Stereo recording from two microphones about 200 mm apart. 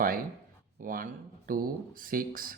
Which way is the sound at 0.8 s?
45° right (ahead or behind).